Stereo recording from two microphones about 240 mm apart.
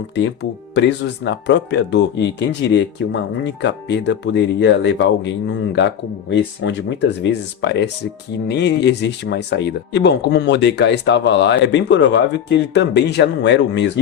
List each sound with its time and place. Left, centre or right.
0.7 s speech: left